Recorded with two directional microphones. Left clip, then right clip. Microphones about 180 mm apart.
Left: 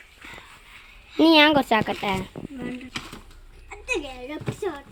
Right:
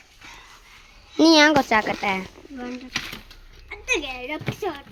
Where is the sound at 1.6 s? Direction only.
15° left (ahead or behind).